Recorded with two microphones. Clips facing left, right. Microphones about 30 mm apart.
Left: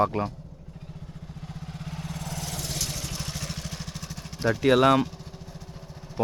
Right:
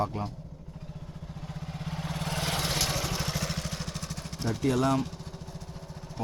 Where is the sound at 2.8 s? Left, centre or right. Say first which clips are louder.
Right 3 dB; right; by 4.4 s centre.